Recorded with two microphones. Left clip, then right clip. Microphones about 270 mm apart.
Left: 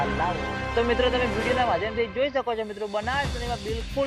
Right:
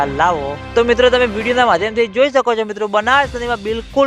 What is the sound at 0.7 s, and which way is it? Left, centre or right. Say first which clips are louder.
Speech: right 12 dB; right.